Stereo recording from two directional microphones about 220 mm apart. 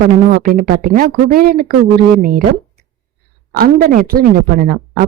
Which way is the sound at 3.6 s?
40° right (ahead or behind).